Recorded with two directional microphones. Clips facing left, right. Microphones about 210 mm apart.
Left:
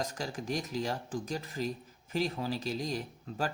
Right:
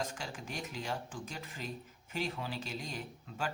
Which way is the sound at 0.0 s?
40° left (ahead or behind).